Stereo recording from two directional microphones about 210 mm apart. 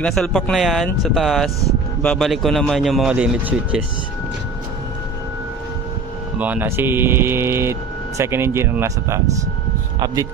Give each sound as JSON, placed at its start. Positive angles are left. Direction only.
{"t": 0.0, "sound": "speech", "side_deg": 0}
{"t": 6.3, "sound": "speech", "side_deg": -10}